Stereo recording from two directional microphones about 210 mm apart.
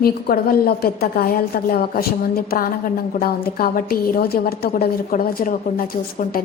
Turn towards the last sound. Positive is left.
turn(degrees=40)  # may be behind; listen again after turning